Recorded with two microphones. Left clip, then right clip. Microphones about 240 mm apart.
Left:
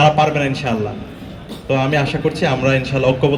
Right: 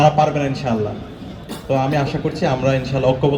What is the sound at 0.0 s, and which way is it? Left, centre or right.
A man's voice, left.